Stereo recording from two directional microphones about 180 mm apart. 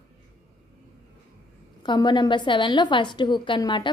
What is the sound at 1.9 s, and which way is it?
A woman's voice, 25° left (ahead or behind).